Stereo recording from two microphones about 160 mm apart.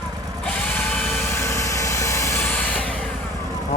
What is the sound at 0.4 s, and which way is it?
Tools, 10° left (ahead or behind).